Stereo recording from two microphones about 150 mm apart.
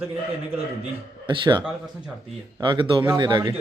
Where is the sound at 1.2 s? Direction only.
30° right (ahead or behind).